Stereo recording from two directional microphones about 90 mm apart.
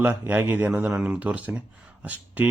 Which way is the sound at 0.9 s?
10° right (ahead or behind).